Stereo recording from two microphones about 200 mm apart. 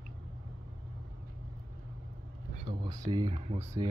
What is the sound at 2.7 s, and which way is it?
Speech, 25° right (ahead or behind).